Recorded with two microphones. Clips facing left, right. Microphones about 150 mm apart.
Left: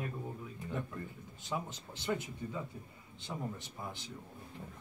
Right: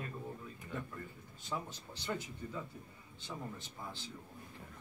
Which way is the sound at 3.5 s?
15° left (ahead or behind).